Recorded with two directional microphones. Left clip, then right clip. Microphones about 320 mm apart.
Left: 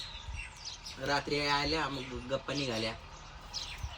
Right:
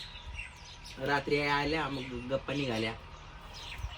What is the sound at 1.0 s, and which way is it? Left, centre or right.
A man's voice, centre.